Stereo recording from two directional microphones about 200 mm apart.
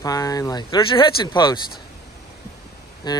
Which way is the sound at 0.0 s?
20° left (ahead or behind).